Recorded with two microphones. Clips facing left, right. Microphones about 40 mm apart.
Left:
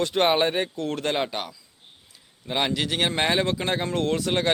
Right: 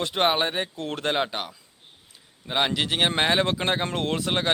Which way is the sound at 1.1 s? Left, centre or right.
Centre.